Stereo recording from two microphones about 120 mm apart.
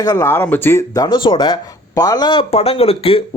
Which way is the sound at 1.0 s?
40° left (ahead or behind).